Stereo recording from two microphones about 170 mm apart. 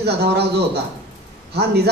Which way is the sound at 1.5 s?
70° right (ahead or behind).